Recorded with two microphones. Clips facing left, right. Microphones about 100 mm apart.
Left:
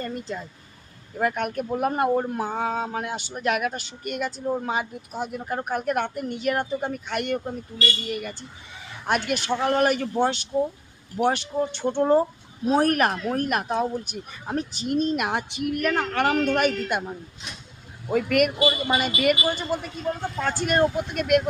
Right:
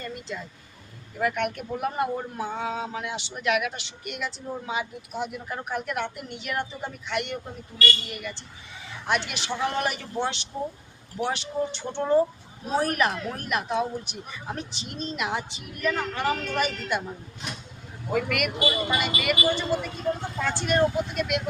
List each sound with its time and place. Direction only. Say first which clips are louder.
0.0 s speech: left 4 dB; 40° left (ahead or behind); by 17.0 s 55° left (ahead or behind)
18.3 s speech: left 6 dB; 40° left (ahead or behind)